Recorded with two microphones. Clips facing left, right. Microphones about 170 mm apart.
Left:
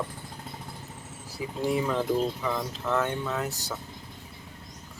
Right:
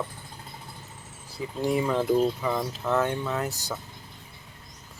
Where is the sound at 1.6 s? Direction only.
Centre (ahead or behind).